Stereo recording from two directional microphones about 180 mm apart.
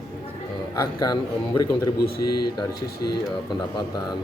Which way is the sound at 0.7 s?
20° left (ahead or behind).